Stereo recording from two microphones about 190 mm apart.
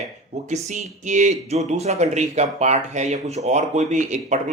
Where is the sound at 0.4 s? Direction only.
40° right (ahead or behind).